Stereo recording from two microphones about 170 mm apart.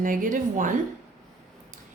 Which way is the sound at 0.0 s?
50° right (ahead or behind).